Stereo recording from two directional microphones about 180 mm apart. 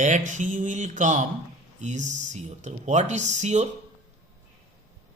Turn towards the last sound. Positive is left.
turn(degrees=-40)  # may be behind; listen again after turning